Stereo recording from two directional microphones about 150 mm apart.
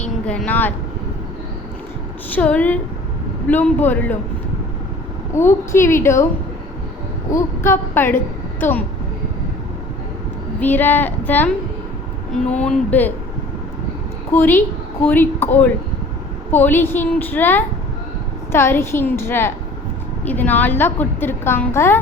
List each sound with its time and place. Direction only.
0.0 s vehicle: 10° left (ahead or behind)
2.3 s a woman's voice: 10° left (ahead or behind)
5.3 s a woman's voice: 15° left (ahead or behind)
7.3 s a woman's voice: 15° left (ahead or behind)
10.6 s a woman's voice: 15° left (ahead or behind)
12.6 s a woman's voice: 10° left (ahead or behind)
14.3 s a woman's voice: 15° left (ahead or behind)